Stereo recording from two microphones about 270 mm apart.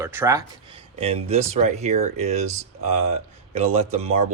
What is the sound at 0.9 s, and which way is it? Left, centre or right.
Speech, right.